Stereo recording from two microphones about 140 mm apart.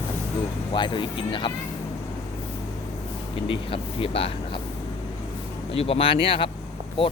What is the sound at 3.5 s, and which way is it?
Speech, 40° left (ahead or behind).